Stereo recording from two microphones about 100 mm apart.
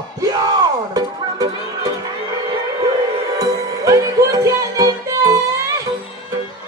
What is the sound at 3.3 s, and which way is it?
Music, 35° right (ahead or behind).